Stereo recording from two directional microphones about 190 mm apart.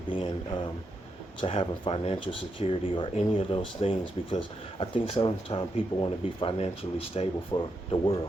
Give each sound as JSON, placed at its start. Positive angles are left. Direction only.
{"t": 0.1, "sound": "speech", "side_deg": 25}